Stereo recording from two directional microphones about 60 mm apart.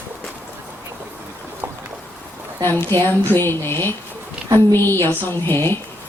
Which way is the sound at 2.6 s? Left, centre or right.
Left.